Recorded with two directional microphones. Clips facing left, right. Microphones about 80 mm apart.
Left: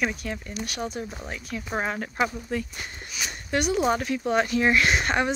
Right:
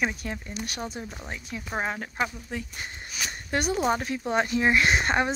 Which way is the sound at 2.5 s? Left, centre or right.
Centre.